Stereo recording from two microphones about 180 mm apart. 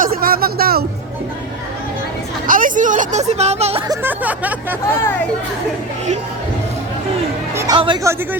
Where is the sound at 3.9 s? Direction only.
10° right (ahead or behind).